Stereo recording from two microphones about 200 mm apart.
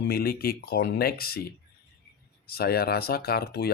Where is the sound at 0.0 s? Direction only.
50° left (ahead or behind).